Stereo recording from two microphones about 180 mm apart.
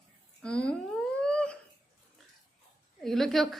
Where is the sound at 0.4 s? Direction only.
5° left (ahead or behind).